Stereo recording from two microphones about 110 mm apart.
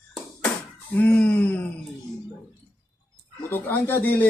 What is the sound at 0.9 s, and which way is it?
Speech, 15° left (ahead or behind).